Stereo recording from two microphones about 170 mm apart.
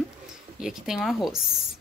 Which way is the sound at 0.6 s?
5° right (ahead or behind).